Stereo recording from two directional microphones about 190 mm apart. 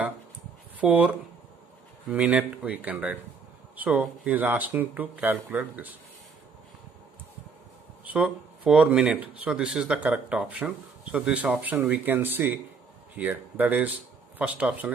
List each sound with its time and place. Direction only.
0.8 s speech: 5° right (ahead or behind)
8.0 s speech: 5° right (ahead or behind)